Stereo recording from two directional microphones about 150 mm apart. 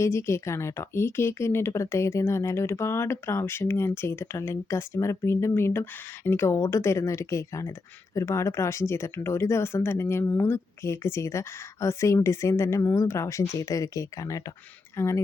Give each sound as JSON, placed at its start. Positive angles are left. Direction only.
{"t": 0.0, "sound": "speech", "side_deg": 20}